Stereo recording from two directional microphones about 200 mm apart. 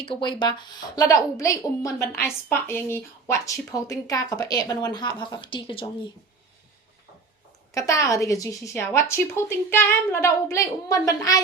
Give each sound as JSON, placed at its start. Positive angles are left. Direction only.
{"t": 0.0, "sound": "a woman's voice", "side_deg": 25}
{"t": 7.7, "sound": "a woman's voice", "side_deg": 15}